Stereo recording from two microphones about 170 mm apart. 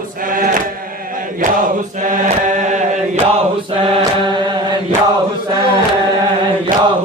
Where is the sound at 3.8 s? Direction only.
25° right (ahead or behind).